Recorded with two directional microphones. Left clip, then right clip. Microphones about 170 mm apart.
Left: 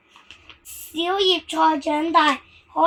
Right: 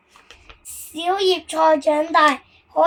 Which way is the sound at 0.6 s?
15° right (ahead or behind).